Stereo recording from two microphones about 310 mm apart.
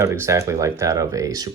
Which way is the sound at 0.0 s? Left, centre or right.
Centre.